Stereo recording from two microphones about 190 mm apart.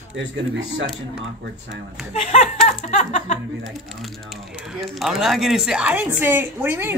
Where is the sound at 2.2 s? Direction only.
35° left (ahead or behind).